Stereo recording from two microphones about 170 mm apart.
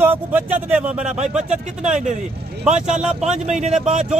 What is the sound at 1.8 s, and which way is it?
Speech, 45° right (ahead or behind).